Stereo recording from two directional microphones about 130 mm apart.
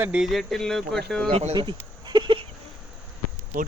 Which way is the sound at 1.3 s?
50° right (ahead or behind).